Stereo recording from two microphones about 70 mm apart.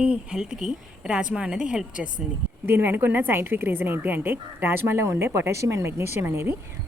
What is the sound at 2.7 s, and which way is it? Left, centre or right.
Speech, right.